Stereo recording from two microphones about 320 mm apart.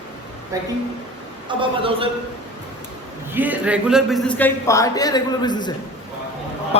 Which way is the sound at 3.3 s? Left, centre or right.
Centre.